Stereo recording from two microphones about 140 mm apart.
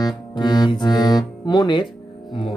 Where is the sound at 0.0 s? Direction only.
30° left (ahead or behind).